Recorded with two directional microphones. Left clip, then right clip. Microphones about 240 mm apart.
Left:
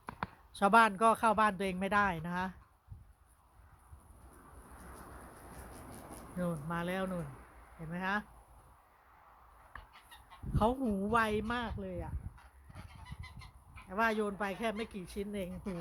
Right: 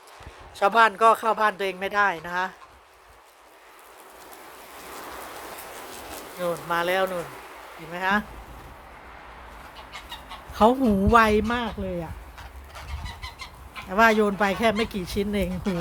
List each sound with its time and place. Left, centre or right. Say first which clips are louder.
0.5 s speech: right 8 dB; centre
6.4 s speech: right 14 dB; centre
10.2 s chicken: right 13 dB; centre
11.1 s speech: right 13 dB; centre
13.9 s speech: right 14 dB; centre
15.7 s speech: right 14 dB; centre